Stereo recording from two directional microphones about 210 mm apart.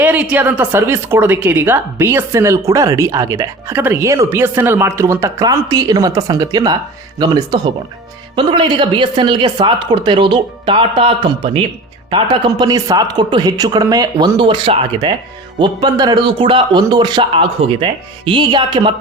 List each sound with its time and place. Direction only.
0.0 s a woman's voice: 5° right (ahead or behind)